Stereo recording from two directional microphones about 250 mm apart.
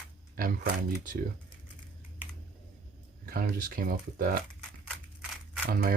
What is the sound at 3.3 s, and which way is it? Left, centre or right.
Speech, right.